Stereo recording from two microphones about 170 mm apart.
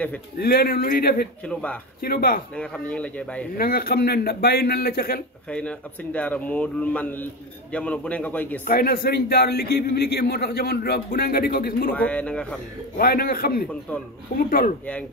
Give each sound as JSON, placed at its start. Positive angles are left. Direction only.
{"t": 0.4, "sound": "a man's voice", "side_deg": 65}
{"t": 1.4, "sound": "a man's voice", "side_deg": 5}
{"t": 2.0, "sound": "a man's voice", "side_deg": 60}
{"t": 2.5, "sound": "a man's voice", "side_deg": 5}
{"t": 3.5, "sound": "a man's voice", "side_deg": 60}
{"t": 5.5, "sound": "a man's voice", "side_deg": 5}
{"t": 8.6, "sound": "a man's voice", "side_deg": 60}
{"t": 11.9, "sound": "a man's voice", "side_deg": 10}
{"t": 12.9, "sound": "a man's voice", "side_deg": 60}
{"t": 13.7, "sound": "a man's voice", "side_deg": 10}
{"t": 14.3, "sound": "a man's voice", "side_deg": 55}